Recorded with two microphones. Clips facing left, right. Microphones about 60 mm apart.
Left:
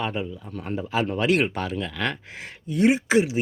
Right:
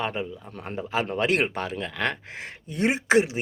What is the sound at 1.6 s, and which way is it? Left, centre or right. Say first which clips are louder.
Speech: left 1 dB; right.